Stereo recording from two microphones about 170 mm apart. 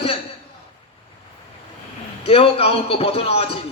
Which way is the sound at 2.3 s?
35° left (ahead or behind).